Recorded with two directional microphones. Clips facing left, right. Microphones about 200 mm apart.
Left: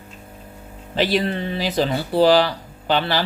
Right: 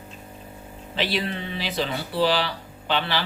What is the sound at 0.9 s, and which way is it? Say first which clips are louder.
Speech: left 7 dB; 45° left (ahead or behind).